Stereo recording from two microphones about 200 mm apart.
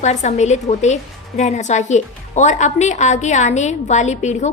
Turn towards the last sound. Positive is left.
turn(degrees=35)  # may be behind; listen again after turning